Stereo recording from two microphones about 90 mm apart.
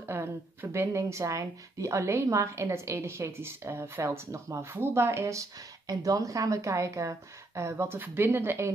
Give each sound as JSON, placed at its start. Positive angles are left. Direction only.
{"t": 0.0, "sound": "speech", "side_deg": -25}